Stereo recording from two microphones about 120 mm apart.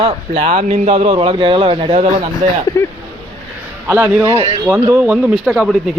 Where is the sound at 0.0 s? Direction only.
60° right (ahead or behind).